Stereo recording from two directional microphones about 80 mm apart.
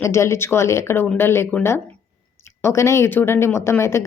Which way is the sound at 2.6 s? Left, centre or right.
Left.